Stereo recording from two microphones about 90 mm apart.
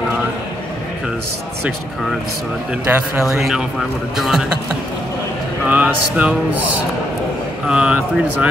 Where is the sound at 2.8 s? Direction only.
25° right (ahead or behind).